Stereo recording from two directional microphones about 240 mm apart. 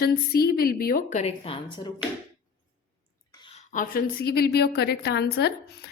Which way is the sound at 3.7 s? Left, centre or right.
Left.